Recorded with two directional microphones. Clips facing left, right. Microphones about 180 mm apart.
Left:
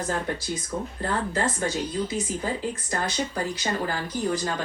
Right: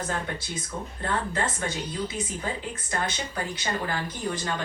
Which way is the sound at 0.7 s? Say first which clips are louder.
Left 5 dB; 5° left (ahead or behind).